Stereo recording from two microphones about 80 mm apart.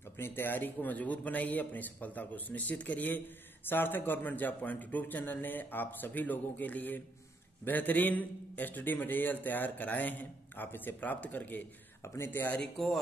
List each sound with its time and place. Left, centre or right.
0.2 s a man's voice: left
12.0 s speech: left
12.3 s a man's voice: left
12.7 s speech: centre